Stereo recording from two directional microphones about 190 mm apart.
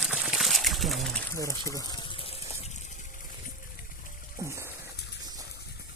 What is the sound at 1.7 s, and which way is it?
Water, 20° left (ahead or behind).